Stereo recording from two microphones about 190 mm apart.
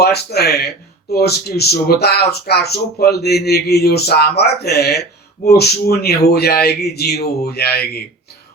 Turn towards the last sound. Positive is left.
turn(degrees=55)  # may be behind; listen again after turning